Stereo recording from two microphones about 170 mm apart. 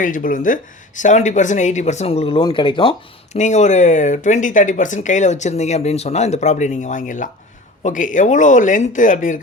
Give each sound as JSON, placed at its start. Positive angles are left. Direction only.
{"t": 0.0, "sound": "speech", "side_deg": 50}
{"t": 3.3, "sound": "speech", "side_deg": 45}